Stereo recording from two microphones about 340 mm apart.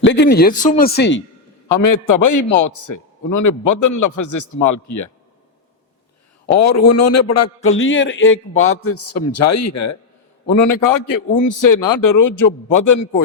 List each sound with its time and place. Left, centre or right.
0.0 s speech: left
1.8 s a man's voice: left
6.6 s a man's voice: left
10.6 s a man's voice: left